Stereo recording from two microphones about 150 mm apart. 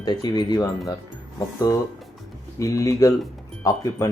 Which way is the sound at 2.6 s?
20° left (ahead or behind).